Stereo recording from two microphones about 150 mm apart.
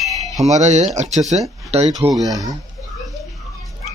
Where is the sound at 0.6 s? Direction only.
50° right (ahead or behind).